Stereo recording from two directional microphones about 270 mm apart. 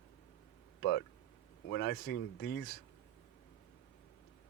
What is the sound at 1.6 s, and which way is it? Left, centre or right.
Speech, left.